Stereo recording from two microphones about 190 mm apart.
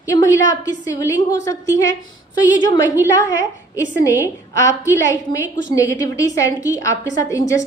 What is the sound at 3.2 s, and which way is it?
A woman's voice, 15° left (ahead or behind).